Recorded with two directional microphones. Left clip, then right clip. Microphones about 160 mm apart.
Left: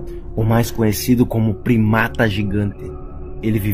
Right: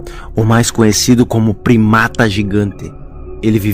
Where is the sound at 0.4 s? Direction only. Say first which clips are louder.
Right 7 dB; 50° right (ahead or behind).